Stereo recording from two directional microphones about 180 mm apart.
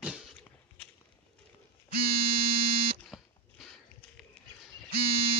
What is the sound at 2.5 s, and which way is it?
Buzzer, 30° right (ahead or behind).